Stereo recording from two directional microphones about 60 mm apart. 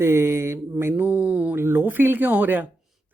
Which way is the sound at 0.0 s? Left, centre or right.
Right.